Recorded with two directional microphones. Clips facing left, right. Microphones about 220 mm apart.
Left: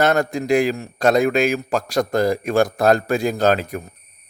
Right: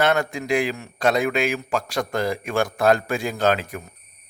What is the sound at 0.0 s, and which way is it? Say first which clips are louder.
A man's voice: left 3 dB; 40° left (ahead or behind).